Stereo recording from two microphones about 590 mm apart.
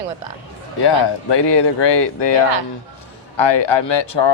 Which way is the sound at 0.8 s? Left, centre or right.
Left.